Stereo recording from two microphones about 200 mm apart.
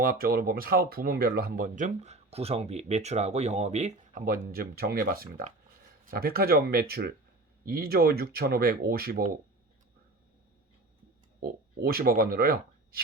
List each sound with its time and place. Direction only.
0.0 s speech: 45° right (ahead or behind)
11.8 s speech: 50° right (ahead or behind)